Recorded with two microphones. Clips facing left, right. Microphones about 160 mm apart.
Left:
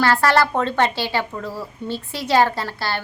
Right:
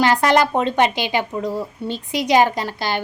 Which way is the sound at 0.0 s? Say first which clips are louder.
Right 2 dB; 20° right (ahead or behind).